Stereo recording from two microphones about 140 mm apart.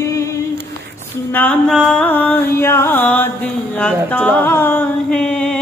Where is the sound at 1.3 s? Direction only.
10° left (ahead or behind).